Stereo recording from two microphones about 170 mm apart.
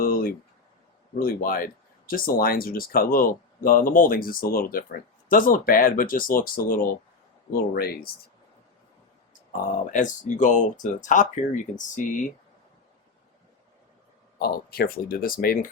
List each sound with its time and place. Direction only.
0.0 s a sound: 60° left (ahead or behind)
1.2 s speech: 60° left (ahead or behind)
9.5 s speech: 50° left (ahead or behind)
14.3 s speech: 65° left (ahead or behind)